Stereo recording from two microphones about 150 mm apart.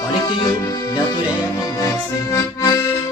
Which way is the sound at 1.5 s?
25° left (ahead or behind).